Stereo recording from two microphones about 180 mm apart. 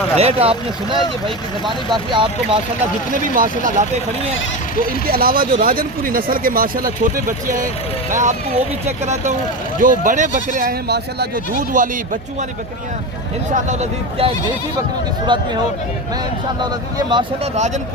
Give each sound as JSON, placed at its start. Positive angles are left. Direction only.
{"t": 0.2, "sound": "speech", "side_deg": -35}
{"t": 3.1, "sound": "speech", "side_deg": -50}
{"t": 5.0, "sound": "speech", "side_deg": -55}
{"t": 9.8, "sound": "speech", "side_deg": -50}
{"t": 11.7, "sound": "speech", "side_deg": -45}
{"t": 13.5, "sound": "speech", "side_deg": -40}
{"t": 15.3, "sound": "speech", "side_deg": -25}
{"t": 17.1, "sound": "speech", "side_deg": -25}